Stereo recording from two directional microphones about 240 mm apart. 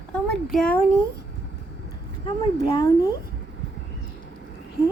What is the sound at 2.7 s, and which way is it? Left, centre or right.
Speech, centre.